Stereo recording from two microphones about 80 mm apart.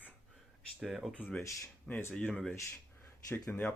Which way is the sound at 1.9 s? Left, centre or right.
Centre.